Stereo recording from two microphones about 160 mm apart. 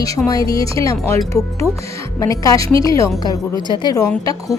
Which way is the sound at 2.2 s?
20° left (ahead or behind).